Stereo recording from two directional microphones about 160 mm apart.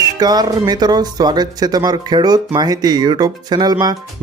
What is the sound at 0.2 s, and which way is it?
Speech, 25° right (ahead or behind).